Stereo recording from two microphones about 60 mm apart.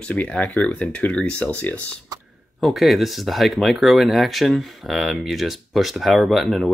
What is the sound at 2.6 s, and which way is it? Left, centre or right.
Speech, centre.